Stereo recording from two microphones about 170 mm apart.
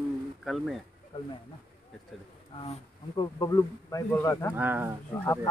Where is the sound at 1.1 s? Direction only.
30° left (ahead or behind).